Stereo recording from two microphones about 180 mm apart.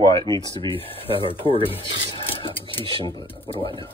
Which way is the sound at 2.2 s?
30° left (ahead or behind).